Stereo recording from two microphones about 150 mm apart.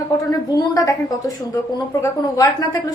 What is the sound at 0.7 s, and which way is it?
A woman's voice, 25° left (ahead or behind).